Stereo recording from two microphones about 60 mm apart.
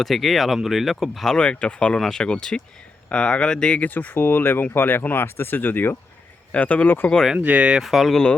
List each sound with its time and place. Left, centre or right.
0.0 s speech: centre
1.4 s speech: centre; by 6.0 s left
6.5 s speech: left
7.4 s speech: centre
7.8 s speech: centre